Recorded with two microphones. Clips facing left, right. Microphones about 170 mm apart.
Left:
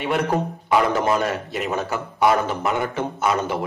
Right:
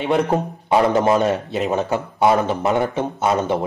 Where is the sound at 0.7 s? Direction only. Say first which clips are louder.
Right 4 dB; 25° right (ahead or behind).